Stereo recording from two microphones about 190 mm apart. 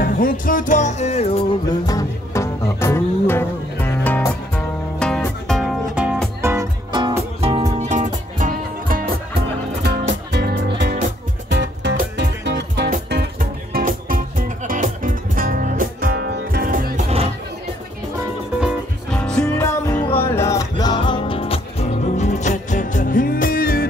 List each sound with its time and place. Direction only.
0.0 s music: 50° left (ahead or behind)
1.9 s music: 15° left (ahead or behind); by 6.1 s 5° right (ahead or behind)
6.4 s music: 15° right (ahead or behind); by 9.4 s 50° right (ahead or behind)
10.3 s music: 65° right (ahead or behind)
13.7 s music: 45° right (ahead or behind)
18.6 s music: 5° left (ahead or behind); by 23.9 s 50° left (ahead or behind)